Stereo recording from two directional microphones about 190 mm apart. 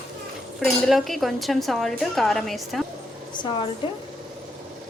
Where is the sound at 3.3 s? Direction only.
25° left (ahead or behind).